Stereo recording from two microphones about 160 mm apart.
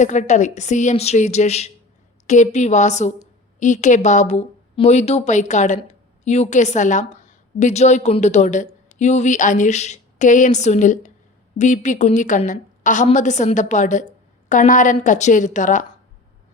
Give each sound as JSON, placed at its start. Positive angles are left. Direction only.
{"t": 0.0, "sound": "a woman's voice", "side_deg": 50}